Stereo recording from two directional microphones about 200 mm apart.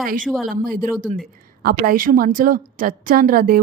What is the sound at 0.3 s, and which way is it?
Speech, centre (ahead or behind).